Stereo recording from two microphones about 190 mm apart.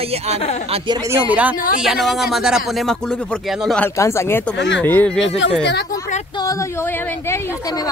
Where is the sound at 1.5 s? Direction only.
45° left (ahead or behind).